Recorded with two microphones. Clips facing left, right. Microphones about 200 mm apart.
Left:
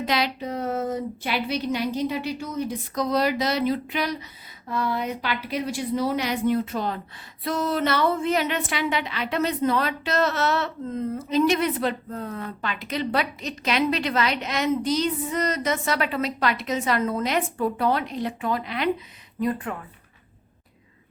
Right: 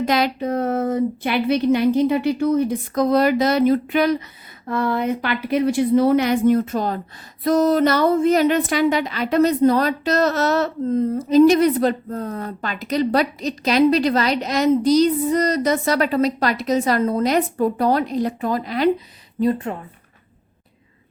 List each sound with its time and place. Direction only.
0.0 s a woman's voice: 50° right (ahead or behind)
19.4 s speech: 30° right (ahead or behind)